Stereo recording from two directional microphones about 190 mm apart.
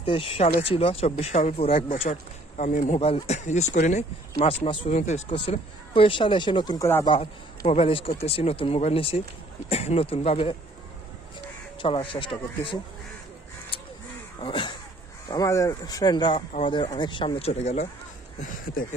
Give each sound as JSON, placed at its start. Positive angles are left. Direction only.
{"t": 0.0, "sound": "speech", "side_deg": 30}
{"t": 11.8, "sound": "speech", "side_deg": 25}
{"t": 13.7, "sound": "crow", "side_deg": 30}
{"t": 14.4, "sound": "speech", "side_deg": 25}